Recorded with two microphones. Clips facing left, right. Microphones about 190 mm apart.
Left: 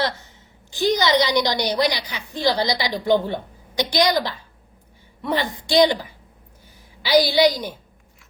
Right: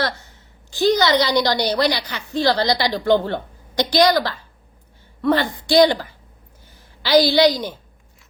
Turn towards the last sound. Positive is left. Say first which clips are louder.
# right 2 dB
turn(degrees=10)  # may be behind; listen again after turning